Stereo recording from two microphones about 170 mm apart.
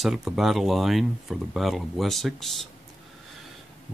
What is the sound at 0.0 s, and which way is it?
Speech, centre (ahead or behind).